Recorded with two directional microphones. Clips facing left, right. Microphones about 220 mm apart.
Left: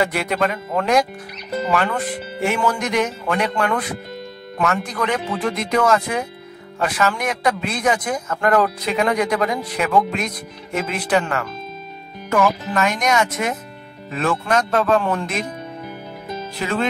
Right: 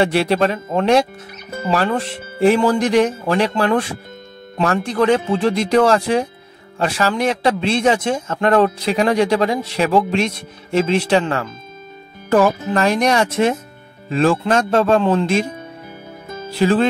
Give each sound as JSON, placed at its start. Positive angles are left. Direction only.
{"t": 0.0, "sound": "a man's voice", "side_deg": -30}